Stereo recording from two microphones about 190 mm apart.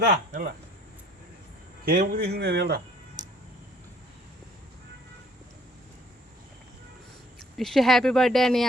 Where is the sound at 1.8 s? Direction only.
50° right (ahead or behind).